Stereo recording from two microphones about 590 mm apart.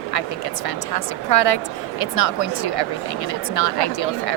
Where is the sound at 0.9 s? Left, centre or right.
Left.